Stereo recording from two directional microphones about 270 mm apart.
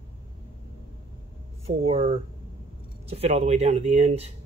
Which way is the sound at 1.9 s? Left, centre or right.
Right.